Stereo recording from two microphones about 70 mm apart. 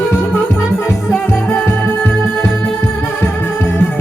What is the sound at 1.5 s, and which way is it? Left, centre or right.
Music, left.